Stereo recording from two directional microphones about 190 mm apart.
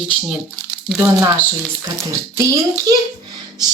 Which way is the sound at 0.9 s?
10° right (ahead or behind).